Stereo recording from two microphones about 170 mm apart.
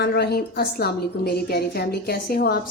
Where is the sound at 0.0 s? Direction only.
70° left (ahead or behind).